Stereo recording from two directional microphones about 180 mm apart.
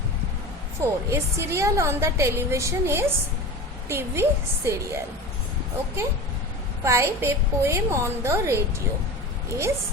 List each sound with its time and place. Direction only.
0.8 s a woman's voice: 15° right (ahead or behind)
6.8 s a woman's voice: 15° right (ahead or behind)